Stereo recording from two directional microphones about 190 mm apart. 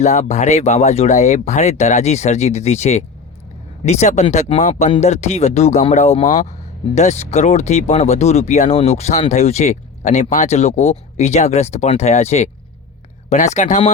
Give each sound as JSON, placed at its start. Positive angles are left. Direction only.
{"t": 0.0, "sound": "speech", "side_deg": 40}